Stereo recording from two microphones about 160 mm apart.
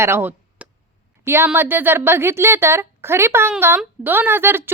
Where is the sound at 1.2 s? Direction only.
15° right (ahead or behind).